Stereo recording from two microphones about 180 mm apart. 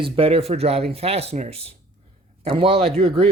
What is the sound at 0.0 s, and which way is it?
Speech, 30° right (ahead or behind).